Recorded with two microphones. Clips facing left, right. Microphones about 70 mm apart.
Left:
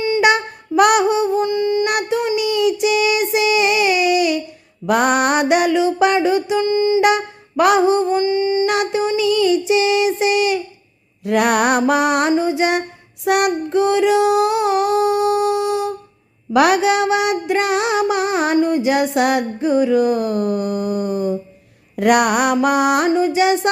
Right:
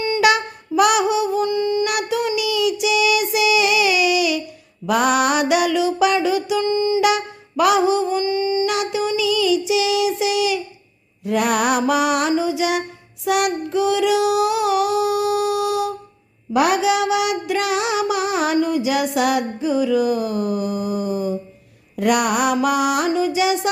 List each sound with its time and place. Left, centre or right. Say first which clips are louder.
0.2 s music: left 1 dB; left
0.8 s music: left 3 dB; left
1.5 s music: left 2 dB; left
1.9 s female singing: left 2 dB; left
4.9 s mantra: left 2 dB; left
6.6 s music: left 3 dB; left
7.0 s music: left 3 dB; left
8.7 s music: left 3 dB; left
9.2 s child singing: left 3 dB; left
11.3 s mantra: left 3 dB; left
12.4 s music: left 3 dB; left
13.2 s child singing: left 3 dB; left
16.5 s mantra: left 3 dB; left